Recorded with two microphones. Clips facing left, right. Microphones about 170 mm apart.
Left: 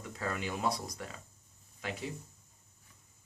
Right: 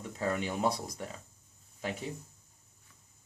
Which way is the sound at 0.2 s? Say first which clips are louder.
Right 4 dB; 25° right (ahead or behind).